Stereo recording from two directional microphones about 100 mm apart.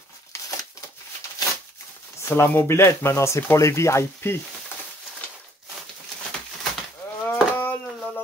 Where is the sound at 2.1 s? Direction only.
25° left (ahead or behind).